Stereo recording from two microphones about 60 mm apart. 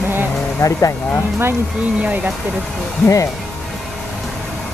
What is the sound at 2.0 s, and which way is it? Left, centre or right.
Speech, right.